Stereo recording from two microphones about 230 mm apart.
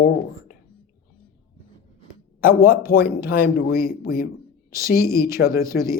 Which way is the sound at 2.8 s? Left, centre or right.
Left.